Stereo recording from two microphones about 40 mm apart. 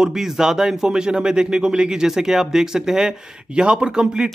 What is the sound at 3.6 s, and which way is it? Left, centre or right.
Speech, right.